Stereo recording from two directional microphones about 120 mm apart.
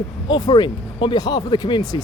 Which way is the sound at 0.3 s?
35° left (ahead or behind).